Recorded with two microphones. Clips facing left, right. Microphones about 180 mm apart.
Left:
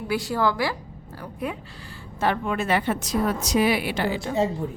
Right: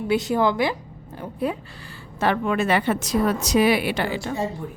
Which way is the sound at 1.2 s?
30° right (ahead or behind).